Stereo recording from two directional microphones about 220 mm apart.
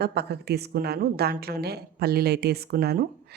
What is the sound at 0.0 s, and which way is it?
A woman's voice, 50° right (ahead or behind).